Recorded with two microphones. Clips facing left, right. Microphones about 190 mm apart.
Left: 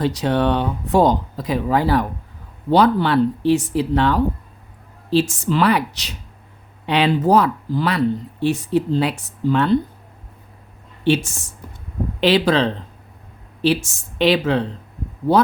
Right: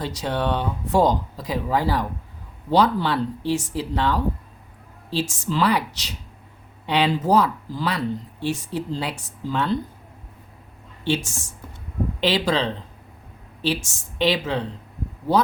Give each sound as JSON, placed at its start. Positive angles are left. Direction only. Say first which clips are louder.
{"t": 0.0, "sound": "speech", "louder": "left 7 dB", "side_deg": 65}
{"t": 11.0, "sound": "speech", "louder": "left 6 dB", "side_deg": 65}
{"t": 14.2, "sound": "speech", "louder": "left 5 dB", "side_deg": 60}